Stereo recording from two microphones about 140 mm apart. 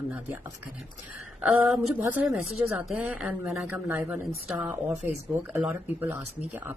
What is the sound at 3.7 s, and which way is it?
Speech, 15° right (ahead or behind).